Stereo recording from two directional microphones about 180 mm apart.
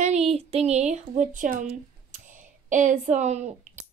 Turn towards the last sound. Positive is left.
turn(degrees=-40)  # may be behind; listen again after turning